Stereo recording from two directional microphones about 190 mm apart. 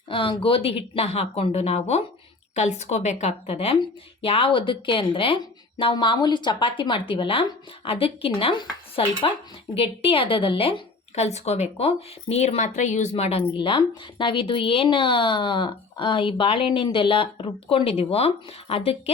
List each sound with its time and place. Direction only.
0.1 s a woman's voice: 25° left (ahead or behind)